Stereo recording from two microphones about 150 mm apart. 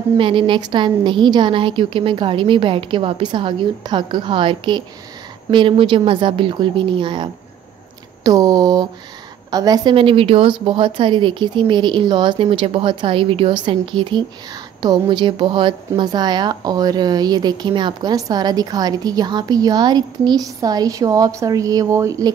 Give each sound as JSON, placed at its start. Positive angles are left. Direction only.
{"t": 0.2, "sound": "a woman's voice", "side_deg": -35}
{"t": 9.9, "sound": "a woman's voice", "side_deg": -40}